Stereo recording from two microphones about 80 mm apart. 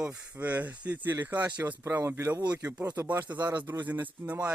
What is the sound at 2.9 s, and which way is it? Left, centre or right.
Speech, right.